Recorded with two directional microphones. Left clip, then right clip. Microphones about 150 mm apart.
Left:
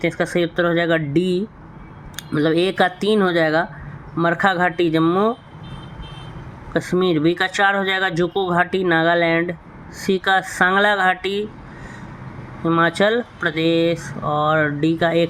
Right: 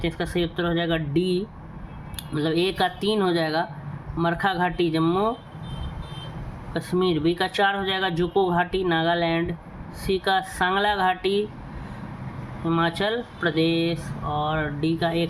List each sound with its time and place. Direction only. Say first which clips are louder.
0.0 s speech: left 7 dB; 45° left (ahead or behind)
6.7 s speech: left 5 dB; 45° left (ahead or behind)
12.6 s speech: left 7 dB; 45° left (ahead or behind)